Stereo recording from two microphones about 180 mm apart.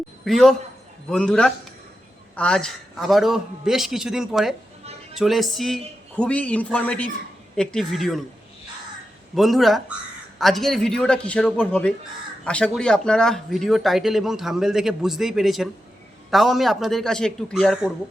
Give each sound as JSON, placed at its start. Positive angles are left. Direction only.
{"t": 0.3, "sound": "speech", "side_deg": 0}
{"t": 9.3, "sound": "speech", "side_deg": 0}